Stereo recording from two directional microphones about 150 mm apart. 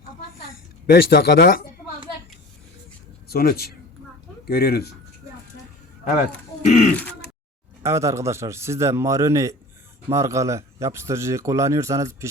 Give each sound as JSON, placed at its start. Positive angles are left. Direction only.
{"t": 0.9, "sound": "speech", "side_deg": 90}
{"t": 3.2, "sound": "speech", "side_deg": 85}
{"t": 6.7, "sound": "speech", "side_deg": 55}
{"t": 7.8, "sound": "a man's voice", "side_deg": -20}